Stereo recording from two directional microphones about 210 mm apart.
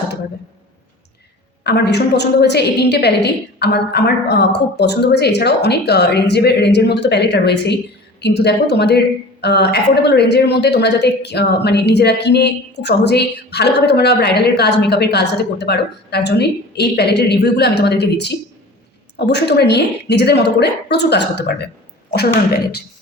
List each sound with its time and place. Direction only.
1.6 s a woman's voice: 50° left (ahead or behind)